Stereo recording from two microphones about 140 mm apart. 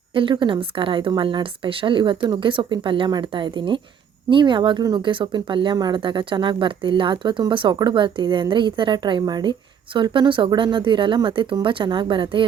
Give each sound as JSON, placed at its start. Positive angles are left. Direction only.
{"t": 0.1, "sound": "speech", "side_deg": -35}